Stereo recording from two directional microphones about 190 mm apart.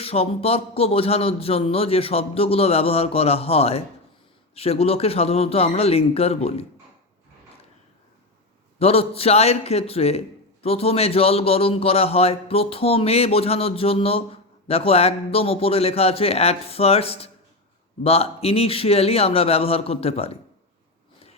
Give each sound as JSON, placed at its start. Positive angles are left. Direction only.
{"t": 0.0, "sound": "a man's voice", "side_deg": 30}
{"t": 8.8, "sound": "a man's voice", "side_deg": 30}